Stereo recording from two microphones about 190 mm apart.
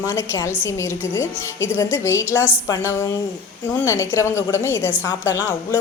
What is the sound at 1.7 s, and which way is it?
Speech, 15° left (ahead or behind).